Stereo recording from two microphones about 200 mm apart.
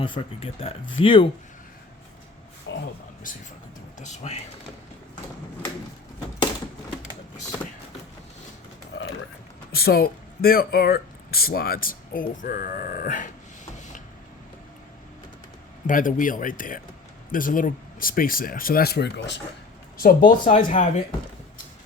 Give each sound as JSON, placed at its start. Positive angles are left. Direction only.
{"t": 0.0, "sound": "speech", "side_deg": 25}
{"t": 2.7, "sound": "a sound", "side_deg": 70}
{"t": 4.0, "sound": "speech", "side_deg": 35}
{"t": 9.7, "sound": "speech", "side_deg": 50}
{"t": 15.9, "sound": "speech", "side_deg": 40}
{"t": 20.0, "sound": "speech", "side_deg": 45}